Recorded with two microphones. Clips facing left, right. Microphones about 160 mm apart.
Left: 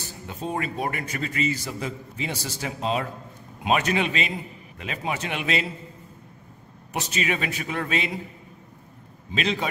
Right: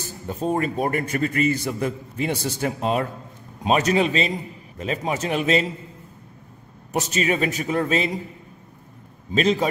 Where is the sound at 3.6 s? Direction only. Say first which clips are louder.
Right 4 dB; 35° right (ahead or behind).